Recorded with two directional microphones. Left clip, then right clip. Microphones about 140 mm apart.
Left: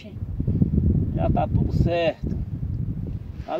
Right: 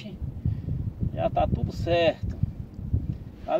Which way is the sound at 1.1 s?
15° right (ahead or behind).